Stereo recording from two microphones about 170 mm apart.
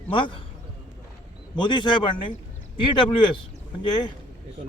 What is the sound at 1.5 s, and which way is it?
Speech, 25° left (ahead or behind).